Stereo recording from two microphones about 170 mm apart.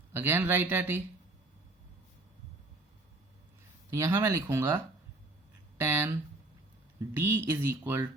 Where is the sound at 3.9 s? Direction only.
15° right (ahead or behind).